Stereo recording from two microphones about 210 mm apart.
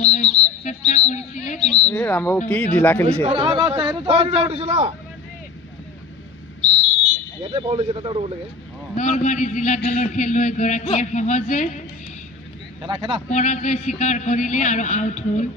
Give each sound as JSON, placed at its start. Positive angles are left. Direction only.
{"t": 0.0, "sound": "a sound", "side_deg": 30}
{"t": 0.3, "sound": "a sound", "side_deg": 5}
{"t": 0.6, "sound": "music", "side_deg": 35}
{"t": 1.7, "sound": "a man's voice", "side_deg": 5}
{"t": 3.2, "sound": "a man's voice", "side_deg": -25}
{"t": 6.6, "sound": "whistle", "side_deg": 5}
{"t": 7.4, "sound": "a man's voice", "side_deg": -25}
{"t": 9.0, "sound": "a man's voice", "side_deg": 35}
{"t": 12.8, "sound": "a man's voice", "side_deg": -25}
{"t": 13.3, "sound": "a man's voice", "side_deg": 35}